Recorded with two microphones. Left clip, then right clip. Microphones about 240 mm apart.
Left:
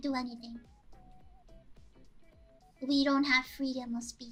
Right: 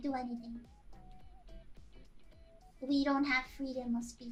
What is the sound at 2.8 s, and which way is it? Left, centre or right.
Speech, centre.